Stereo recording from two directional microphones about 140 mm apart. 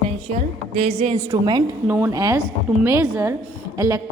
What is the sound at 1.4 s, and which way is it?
Speech, 30° right (ahead or behind).